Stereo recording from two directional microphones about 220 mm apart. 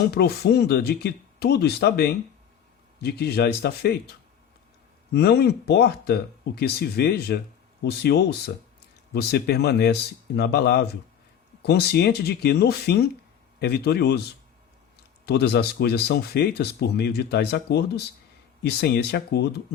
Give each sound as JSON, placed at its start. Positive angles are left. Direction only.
{"t": 0.1, "sound": "speech", "side_deg": 45}
{"t": 5.1, "sound": "speech", "side_deg": 50}
{"t": 15.3, "sound": "speech", "side_deg": 50}